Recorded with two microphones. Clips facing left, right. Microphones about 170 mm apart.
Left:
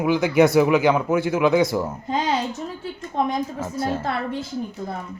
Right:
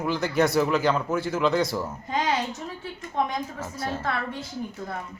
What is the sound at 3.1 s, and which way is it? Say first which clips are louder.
Speech: left 4 dB; 30° left (ahead or behind).